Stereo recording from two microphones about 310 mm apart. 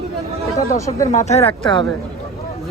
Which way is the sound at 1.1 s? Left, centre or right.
Centre.